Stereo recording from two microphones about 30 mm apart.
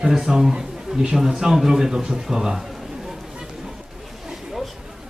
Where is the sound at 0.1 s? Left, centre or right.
Centre.